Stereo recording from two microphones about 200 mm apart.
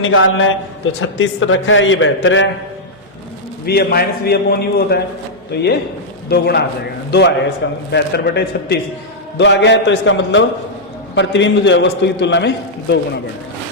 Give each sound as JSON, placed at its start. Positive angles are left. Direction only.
{"t": 0.0, "sound": "a man's voice", "side_deg": 85}
{"t": 3.7, "sound": "a man's voice", "side_deg": 50}